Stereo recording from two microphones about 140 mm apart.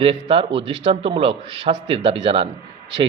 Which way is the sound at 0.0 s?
40° right (ahead or behind).